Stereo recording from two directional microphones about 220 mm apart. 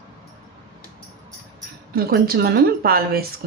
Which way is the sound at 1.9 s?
45° right (ahead or behind).